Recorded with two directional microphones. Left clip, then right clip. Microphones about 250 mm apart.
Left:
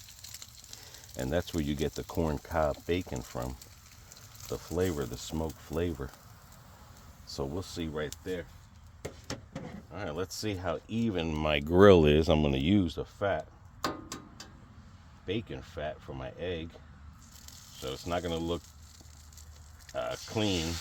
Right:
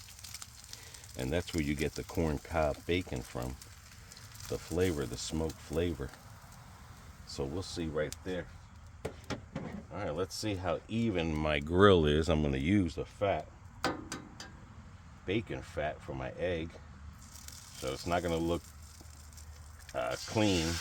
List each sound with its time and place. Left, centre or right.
1.1 s speech: left
4.5 s speech: centre
7.3 s speech: left
15.3 s speech: left
17.7 s speech: centre
19.9 s speech: centre